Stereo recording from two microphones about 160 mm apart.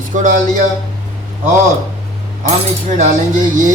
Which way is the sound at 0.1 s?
50° right (ahead or behind).